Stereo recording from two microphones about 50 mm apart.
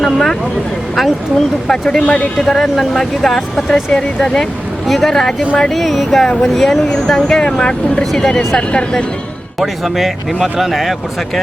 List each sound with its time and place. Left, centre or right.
0.0 s speech: centre
1.6 s speech: centre
2.0 s speech: left
2.4 s speech: centre
4.9 s speech: centre
9.6 s speech: centre